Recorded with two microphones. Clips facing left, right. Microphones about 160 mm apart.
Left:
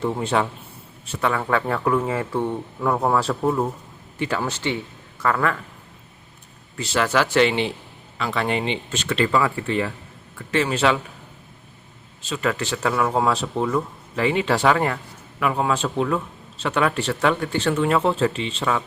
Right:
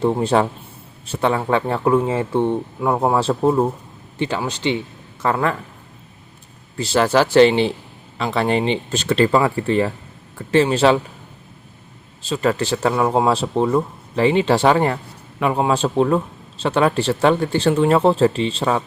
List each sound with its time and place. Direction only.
0.0 s a man's voice: 35° right (ahead or behind)
4.4 s speech: 15° right (ahead or behind)
6.7 s a man's voice: 35° right (ahead or behind)
12.2 s a man's voice: 35° right (ahead or behind)